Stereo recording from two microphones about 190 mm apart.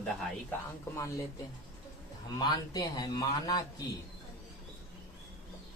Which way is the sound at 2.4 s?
20° left (ahead or behind).